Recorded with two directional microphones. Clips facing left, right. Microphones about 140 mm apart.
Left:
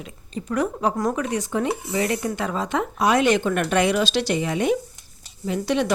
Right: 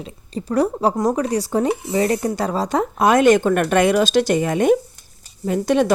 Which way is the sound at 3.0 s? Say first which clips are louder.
Right 5 dB; 50° right (ahead or behind).